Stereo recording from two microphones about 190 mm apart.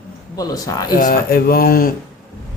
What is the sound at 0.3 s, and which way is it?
Speech, 20° left (ahead or behind).